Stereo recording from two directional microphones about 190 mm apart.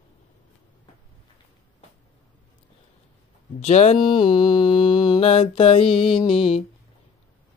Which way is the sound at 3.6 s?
35° left (ahead or behind).